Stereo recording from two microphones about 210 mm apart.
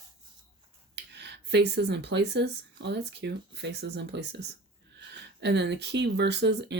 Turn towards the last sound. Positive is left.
turn(degrees=-55)  # may be behind; listen again after turning